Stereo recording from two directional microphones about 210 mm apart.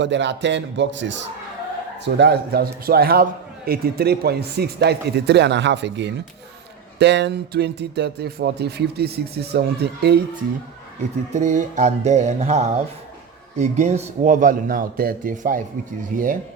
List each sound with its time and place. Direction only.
0.0 s a man's voice: 60° right (ahead or behind)
11.3 s a man's voice: 35° right (ahead or behind)